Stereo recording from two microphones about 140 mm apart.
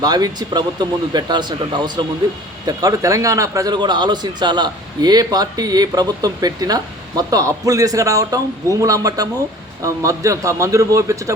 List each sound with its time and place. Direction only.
0.0 s a man's voice: 30° right (ahead or behind)